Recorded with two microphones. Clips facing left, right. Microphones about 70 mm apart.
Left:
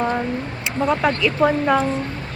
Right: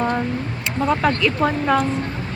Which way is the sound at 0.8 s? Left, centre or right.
Centre.